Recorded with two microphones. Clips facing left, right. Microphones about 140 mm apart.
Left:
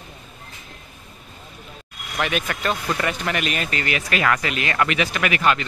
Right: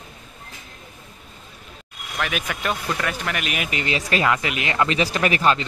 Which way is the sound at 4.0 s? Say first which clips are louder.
Right 4 dB; 30° right (ahead or behind).